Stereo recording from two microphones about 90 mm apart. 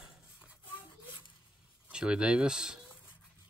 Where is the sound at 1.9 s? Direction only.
10° right (ahead or behind).